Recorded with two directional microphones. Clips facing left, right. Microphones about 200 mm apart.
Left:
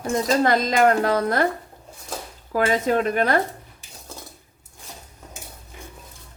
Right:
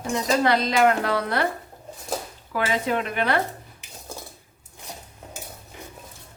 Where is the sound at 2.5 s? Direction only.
40° left (ahead or behind).